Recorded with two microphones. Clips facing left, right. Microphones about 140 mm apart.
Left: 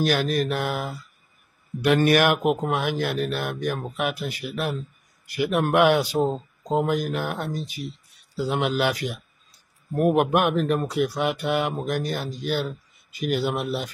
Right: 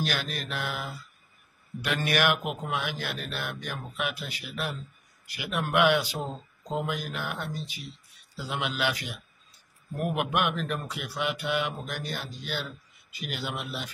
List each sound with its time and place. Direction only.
0.0 s speech: 40° left (ahead or behind)